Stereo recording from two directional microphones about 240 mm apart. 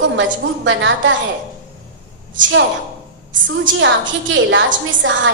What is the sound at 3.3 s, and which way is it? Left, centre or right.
A woman's voice, right.